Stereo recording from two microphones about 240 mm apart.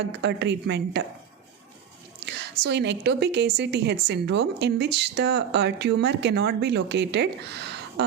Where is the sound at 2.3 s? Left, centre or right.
Right.